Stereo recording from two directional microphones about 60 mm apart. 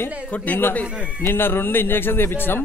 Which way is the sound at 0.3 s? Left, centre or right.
Left.